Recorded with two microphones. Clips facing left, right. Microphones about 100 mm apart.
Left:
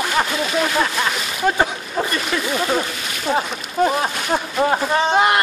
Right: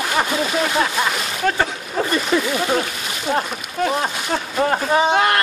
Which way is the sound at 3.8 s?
25° left (ahead or behind).